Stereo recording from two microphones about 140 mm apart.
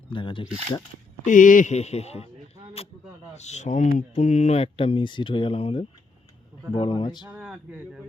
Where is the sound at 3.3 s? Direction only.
55° left (ahead or behind); by 7.3 s 35° left (ahead or behind).